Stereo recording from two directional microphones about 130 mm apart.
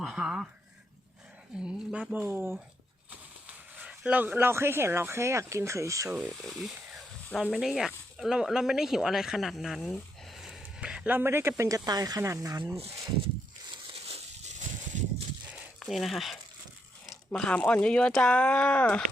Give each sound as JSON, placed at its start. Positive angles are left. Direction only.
{"t": 0.0, "sound": "speech", "side_deg": -5}
{"t": 1.5, "sound": "speech", "side_deg": -5}
{"t": 3.8, "sound": "speech", "side_deg": -10}
{"t": 6.1, "sound": "speech", "side_deg": -10}
{"t": 14.9, "sound": "a sound", "side_deg": -70}
{"t": 15.4, "sound": "a sound", "side_deg": 0}
{"t": 17.3, "sound": "speech", "side_deg": 10}